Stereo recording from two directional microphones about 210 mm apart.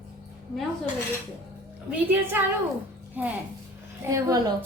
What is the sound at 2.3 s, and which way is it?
A woman's voice, 10° right (ahead or behind).